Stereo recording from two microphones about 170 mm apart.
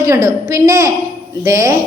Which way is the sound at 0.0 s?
15° right (ahead or behind).